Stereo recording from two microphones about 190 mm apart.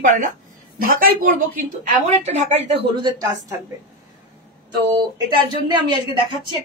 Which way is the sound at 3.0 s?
20° right (ahead or behind).